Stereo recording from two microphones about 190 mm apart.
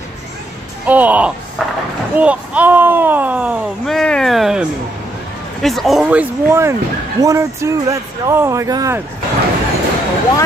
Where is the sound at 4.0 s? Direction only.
5° left (ahead or behind); by 6.8 s 15° right (ahead or behind).